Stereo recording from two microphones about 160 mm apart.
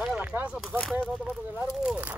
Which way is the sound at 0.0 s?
5° right (ahead or behind).